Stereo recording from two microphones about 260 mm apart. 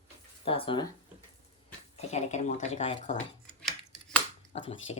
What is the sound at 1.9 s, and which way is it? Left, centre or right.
Speech, left.